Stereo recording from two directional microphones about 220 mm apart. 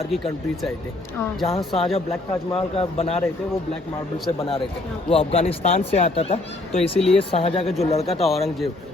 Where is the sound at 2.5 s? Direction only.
25° left (ahead or behind).